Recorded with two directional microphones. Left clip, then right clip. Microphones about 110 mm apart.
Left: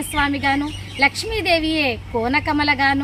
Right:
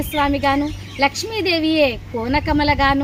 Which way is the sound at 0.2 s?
20° left (ahead or behind).